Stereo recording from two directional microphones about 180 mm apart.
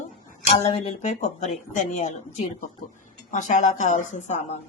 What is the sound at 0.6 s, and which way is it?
A woman's voice, 35° left (ahead or behind).